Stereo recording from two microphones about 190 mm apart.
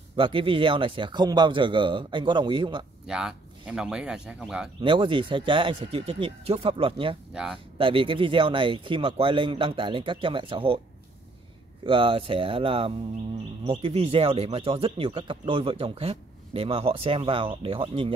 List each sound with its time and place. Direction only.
0.1 s speech: 25° right (ahead or behind)
3.1 s speech: 5° right (ahead or behind)
4.8 s speech: 25° right (ahead or behind)
11.8 s speech: 25° right (ahead or behind)